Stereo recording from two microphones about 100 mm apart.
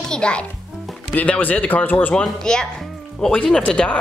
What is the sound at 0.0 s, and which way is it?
A child's voice, 10° left (ahead or behind).